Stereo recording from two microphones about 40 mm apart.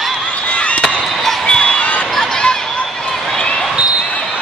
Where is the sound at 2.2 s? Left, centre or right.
Centre.